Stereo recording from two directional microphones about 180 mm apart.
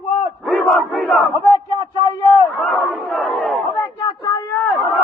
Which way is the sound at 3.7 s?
20° left (ahead or behind).